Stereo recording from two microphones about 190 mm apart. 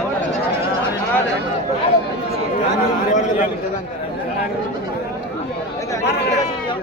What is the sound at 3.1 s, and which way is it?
Speech, 40° left (ahead or behind).